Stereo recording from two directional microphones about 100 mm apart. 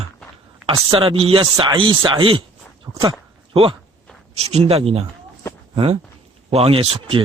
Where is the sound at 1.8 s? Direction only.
55° right (ahead or behind).